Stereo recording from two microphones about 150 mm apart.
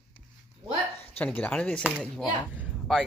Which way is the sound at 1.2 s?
10° left (ahead or behind).